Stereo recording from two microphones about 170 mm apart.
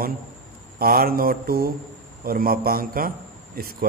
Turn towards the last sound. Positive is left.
turn(degrees=-60)  # may be behind; listen again after turning